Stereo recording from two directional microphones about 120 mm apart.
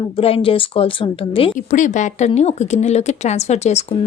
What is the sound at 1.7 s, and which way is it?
Speech, 90° left.